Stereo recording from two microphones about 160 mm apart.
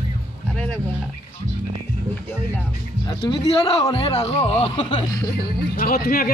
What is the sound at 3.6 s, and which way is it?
A woman's voice, 35° left (ahead or behind).